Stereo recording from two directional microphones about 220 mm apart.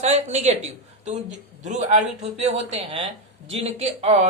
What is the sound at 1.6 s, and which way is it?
A man's voice, 30° right (ahead or behind).